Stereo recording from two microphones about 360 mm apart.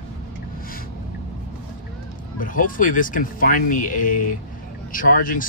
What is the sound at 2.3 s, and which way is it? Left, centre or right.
Speech, left.